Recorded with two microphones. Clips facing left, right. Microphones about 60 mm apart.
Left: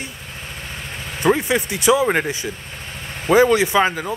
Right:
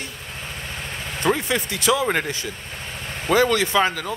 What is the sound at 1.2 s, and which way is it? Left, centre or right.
Speech, centre.